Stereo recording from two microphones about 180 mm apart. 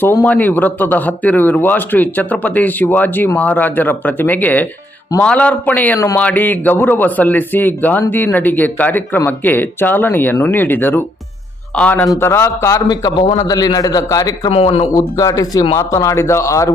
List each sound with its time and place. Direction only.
0.0 s a man's voice: 10° left (ahead or behind)
14.5 s a man's voice: 35° left (ahead or behind)
14.9 s speech: 20° left (ahead or behind)